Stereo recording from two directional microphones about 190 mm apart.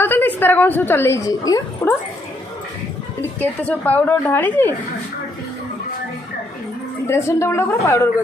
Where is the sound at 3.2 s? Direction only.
10° left (ahead or behind).